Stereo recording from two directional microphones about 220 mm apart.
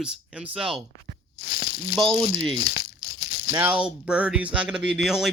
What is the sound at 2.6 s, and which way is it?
Speech, 45° left (ahead or behind).